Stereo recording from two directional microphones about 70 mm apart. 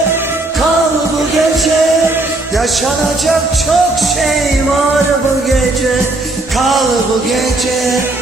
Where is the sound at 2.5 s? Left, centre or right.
Centre.